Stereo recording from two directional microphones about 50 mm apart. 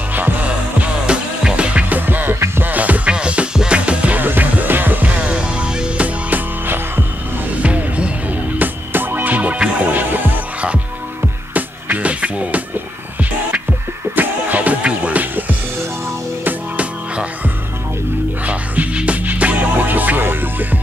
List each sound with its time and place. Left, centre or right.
0.1 s music: right
1.0 s music: centre
2.0 s music: right
3.1 s music: right
4.2 s music: right; by 6.0 s centre
6.0 s music: right
7.6 s music: right
11.5 s music: right
14.1 s music: right
16.7 s music: right
18.4 s music: right